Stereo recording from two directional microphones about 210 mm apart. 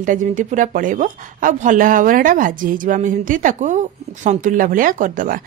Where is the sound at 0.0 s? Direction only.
40° right (ahead or behind).